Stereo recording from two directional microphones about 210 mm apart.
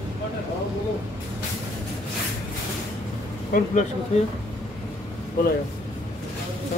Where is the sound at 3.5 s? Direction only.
35° left (ahead or behind).